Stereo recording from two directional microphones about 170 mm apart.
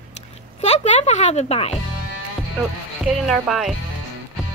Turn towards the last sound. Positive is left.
turn(degrees=0)  # may be behind; listen again after turning